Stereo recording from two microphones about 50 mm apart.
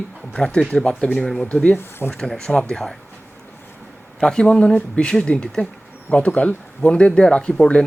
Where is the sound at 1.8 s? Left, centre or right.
Left.